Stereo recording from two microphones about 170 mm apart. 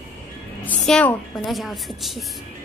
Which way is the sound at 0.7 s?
5° left (ahead or behind).